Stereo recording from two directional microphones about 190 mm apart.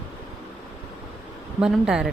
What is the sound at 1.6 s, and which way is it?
Speech, 5° right (ahead or behind).